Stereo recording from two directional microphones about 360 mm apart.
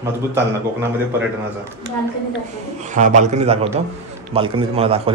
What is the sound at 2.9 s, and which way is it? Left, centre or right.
A man's voice, right.